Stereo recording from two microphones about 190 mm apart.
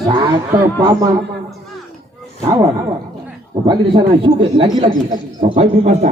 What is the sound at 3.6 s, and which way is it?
Speech, 25° right (ahead or behind).